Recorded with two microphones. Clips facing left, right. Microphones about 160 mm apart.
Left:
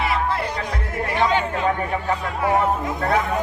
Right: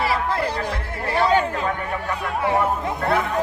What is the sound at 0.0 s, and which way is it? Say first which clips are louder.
Music: even; 30° right (ahead or behind).